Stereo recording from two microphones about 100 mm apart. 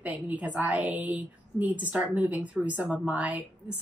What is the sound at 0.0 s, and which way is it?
A woman's voice, 15° right (ahead or behind).